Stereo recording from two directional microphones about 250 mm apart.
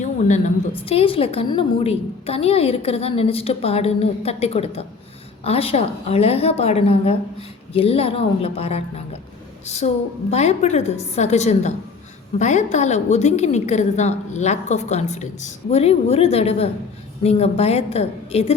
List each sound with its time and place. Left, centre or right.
0.0 s a woman's voice: left